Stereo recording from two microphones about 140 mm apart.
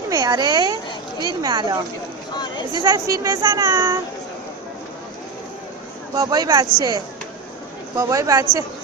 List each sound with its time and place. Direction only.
0.1 s speech: 25° right (ahead or behind)
2.3 s a sound: 30° left (ahead or behind)
2.7 s speech: 25° right (ahead or behind)
6.1 s speech: 30° right (ahead or behind)